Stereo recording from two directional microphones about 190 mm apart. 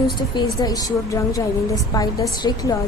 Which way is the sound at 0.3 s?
20° left (ahead or behind).